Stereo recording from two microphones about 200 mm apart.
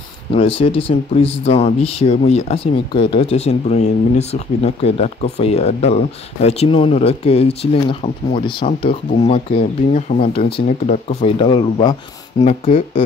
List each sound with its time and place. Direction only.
0.3 s speech: 30° left (ahead or behind)
12.4 s speech: 35° left (ahead or behind)